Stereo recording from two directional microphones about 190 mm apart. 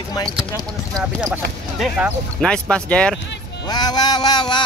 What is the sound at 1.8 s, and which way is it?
Speech, 5° right (ahead or behind).